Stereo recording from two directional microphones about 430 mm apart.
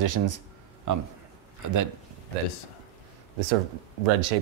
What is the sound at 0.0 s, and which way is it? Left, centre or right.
Speech, right.